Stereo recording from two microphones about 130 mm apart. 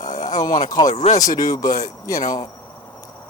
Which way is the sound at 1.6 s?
80° left.